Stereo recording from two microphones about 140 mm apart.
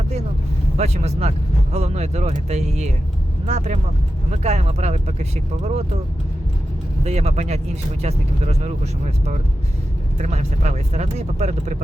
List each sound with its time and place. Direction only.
0.8 s speech: 50° right (ahead or behind)
7.0 s speech: 50° right (ahead or behind)